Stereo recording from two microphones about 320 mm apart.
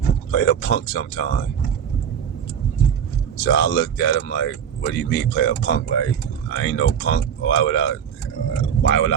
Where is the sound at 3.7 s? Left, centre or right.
Left.